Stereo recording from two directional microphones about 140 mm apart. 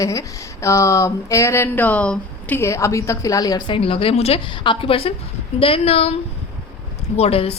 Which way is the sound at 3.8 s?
40° left (ahead or behind).